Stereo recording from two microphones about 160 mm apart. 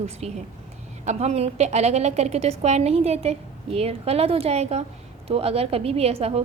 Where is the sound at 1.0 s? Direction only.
40° right (ahead or behind).